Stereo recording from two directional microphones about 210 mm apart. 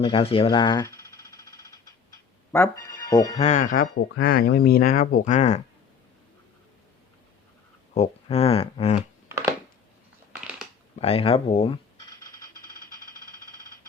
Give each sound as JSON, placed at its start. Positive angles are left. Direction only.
{"t": 0.0, "sound": "a sound", "side_deg": 25}
{"t": 2.5, "sound": "speech", "side_deg": 10}
{"t": 3.3, "sound": "speech", "side_deg": 35}
{"t": 7.9, "sound": "speech", "side_deg": 30}
{"t": 10.3, "sound": "crushing", "side_deg": -5}
{"t": 11.0, "sound": "speech", "side_deg": 25}